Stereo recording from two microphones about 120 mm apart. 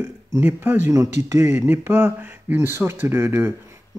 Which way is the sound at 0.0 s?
20° right (ahead or behind).